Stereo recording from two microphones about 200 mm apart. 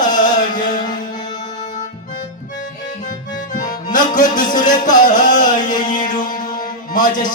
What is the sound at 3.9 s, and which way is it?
Music, 40° left (ahead or behind).